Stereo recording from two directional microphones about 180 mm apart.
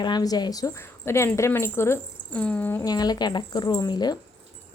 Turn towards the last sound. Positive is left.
turn(degrees=20)  # may be behind; listen again after turning